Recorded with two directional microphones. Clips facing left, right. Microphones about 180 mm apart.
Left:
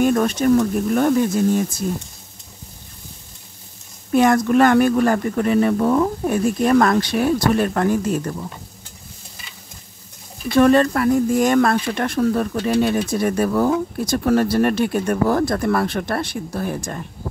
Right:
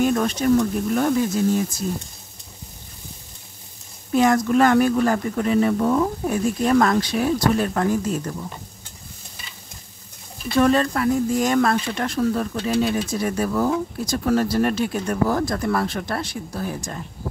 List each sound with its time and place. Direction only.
0.0 s speech: 50° left (ahead or behind)
4.1 s speech: 60° left (ahead or behind)
10.6 s speech: 55° left (ahead or behind)